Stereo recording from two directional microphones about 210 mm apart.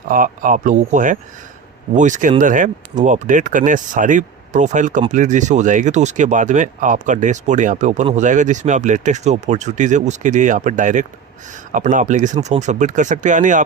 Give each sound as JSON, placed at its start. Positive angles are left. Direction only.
{"t": 0.1, "sound": "speech", "side_deg": -40}